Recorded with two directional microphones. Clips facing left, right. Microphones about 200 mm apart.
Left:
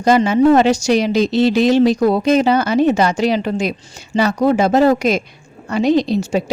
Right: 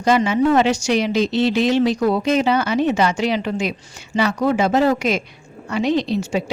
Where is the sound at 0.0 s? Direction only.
40° left (ahead or behind).